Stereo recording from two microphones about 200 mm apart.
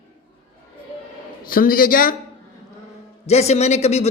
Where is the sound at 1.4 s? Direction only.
45° left (ahead or behind).